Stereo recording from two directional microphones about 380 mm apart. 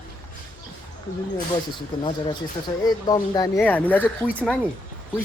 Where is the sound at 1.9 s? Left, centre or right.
Centre.